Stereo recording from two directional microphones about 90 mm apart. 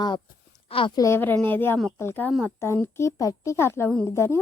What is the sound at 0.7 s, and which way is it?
Speech, 85° left.